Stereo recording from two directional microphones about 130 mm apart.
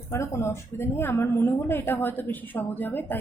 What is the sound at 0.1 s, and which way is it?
A woman's voice, 20° left (ahead or behind).